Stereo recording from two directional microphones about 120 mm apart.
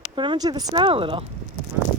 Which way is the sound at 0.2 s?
35° right (ahead or behind).